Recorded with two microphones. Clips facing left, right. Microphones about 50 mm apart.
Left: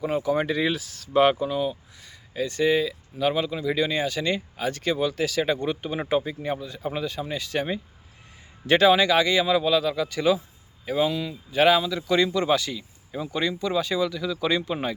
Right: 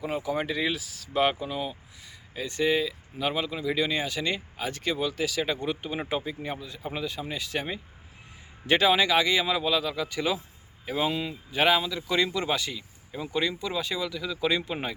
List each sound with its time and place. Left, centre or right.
0.0 s speech: centre
11.1 s speech: right
11.5 s speech: centre